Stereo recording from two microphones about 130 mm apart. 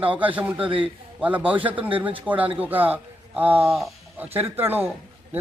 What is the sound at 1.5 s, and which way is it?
Speech, 40° right (ahead or behind).